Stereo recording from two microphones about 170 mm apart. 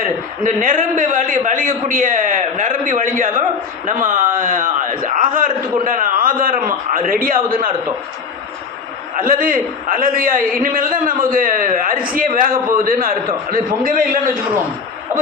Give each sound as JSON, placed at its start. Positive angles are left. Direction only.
{"t": 0.4, "sound": "a man's voice", "side_deg": -50}
{"t": 9.1, "sound": "a man's voice", "side_deg": -55}